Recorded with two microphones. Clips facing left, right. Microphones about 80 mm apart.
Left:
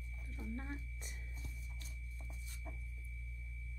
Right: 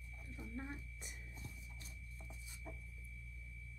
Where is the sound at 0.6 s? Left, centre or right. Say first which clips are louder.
Left 1 dB; centre.